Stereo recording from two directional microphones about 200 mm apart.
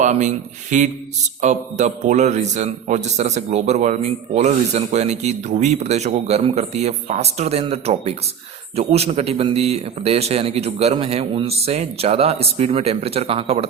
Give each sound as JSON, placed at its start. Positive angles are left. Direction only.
{"t": 0.0, "sound": "a man's voice", "side_deg": -35}